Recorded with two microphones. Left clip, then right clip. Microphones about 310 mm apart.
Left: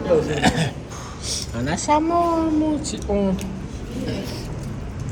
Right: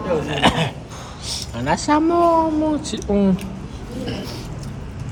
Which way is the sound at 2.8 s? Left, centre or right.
Right.